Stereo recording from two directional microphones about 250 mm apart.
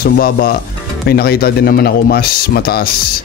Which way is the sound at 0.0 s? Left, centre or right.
Left.